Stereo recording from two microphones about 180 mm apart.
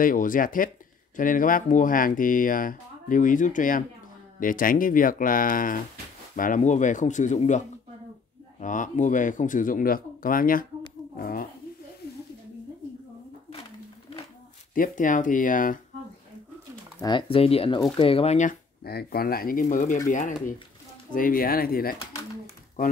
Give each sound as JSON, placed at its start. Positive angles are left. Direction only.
{"t": 0.0, "sound": "speech", "side_deg": 50}
{"t": 14.7, "sound": "speech", "side_deg": 50}
{"t": 17.0, "sound": "speech", "side_deg": 30}